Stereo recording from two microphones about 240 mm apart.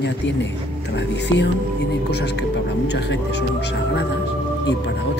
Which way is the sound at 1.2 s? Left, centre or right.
Left.